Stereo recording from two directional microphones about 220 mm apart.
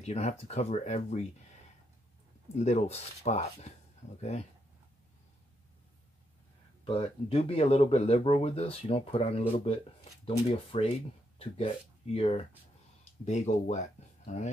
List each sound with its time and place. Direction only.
0.0 s speech: 30° left (ahead or behind)
2.5 s speech: 30° left (ahead or behind)
6.8 s speech: 25° left (ahead or behind)